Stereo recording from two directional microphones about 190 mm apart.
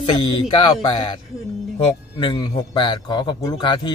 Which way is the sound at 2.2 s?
25° left (ahead or behind).